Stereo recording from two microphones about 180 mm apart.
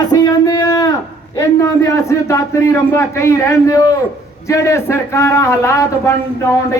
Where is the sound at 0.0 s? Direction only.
20° left (ahead or behind).